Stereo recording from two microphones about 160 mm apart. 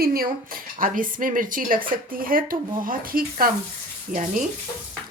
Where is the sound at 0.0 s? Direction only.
65° right (ahead or behind).